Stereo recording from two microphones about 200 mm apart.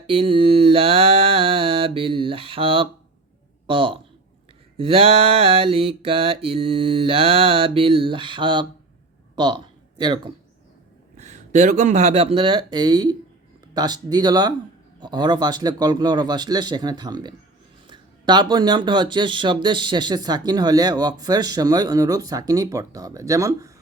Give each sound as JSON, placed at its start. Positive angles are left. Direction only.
{"t": 0.1, "sound": "mantra", "side_deg": -25}
{"t": 3.7, "sound": "speech", "side_deg": -25}
{"t": 11.2, "sound": "speech", "side_deg": -35}